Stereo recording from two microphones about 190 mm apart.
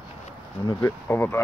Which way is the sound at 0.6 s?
10° left (ahead or behind).